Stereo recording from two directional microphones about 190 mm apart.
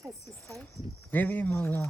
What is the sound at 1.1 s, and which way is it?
Speech, 10° left (ahead or behind).